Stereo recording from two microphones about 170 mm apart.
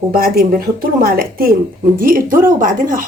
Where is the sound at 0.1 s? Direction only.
65° right (ahead or behind).